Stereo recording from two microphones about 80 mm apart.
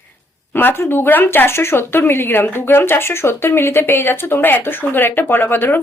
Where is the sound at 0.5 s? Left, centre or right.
Left.